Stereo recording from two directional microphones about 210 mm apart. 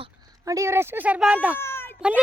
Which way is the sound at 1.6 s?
10° left (ahead or behind).